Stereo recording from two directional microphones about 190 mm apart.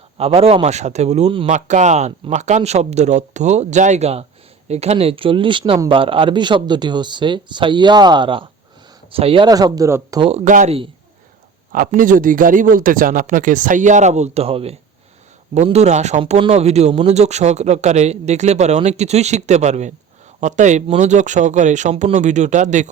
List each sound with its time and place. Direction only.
0.2 s a man's voice: 30° right (ahead or behind)
10.2 s a man's voice: 40° right (ahead or behind)